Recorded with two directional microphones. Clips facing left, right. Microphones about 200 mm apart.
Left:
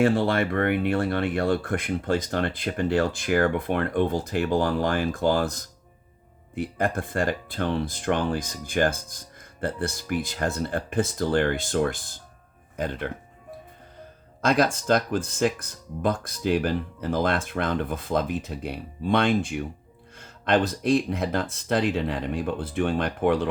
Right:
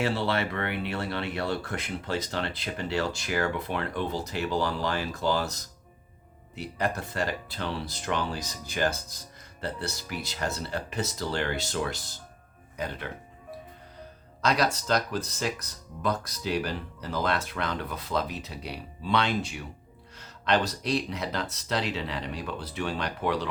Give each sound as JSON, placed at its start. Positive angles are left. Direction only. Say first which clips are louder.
{"t": 0.0, "sound": "speech", "louder": "left 6 dB", "side_deg": 50}
{"t": 14.4, "sound": "speech", "louder": "left 4 dB", "side_deg": 50}